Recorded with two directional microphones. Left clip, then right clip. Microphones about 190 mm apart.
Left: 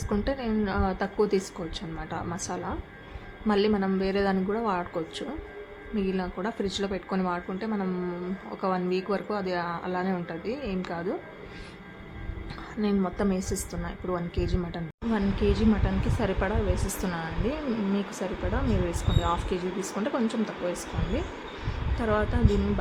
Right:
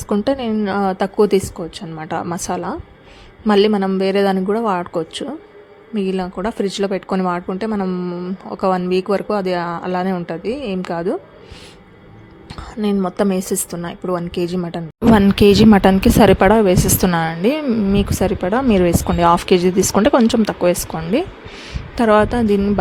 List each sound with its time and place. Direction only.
0.1 s a woman's voice: 40° right (ahead or behind)
12.7 s a woman's voice: 40° right (ahead or behind)
15.1 s a woman's voice: 60° right (ahead or behind)